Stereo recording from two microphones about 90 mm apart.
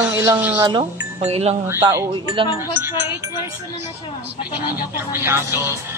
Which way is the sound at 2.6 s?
25° right (ahead or behind).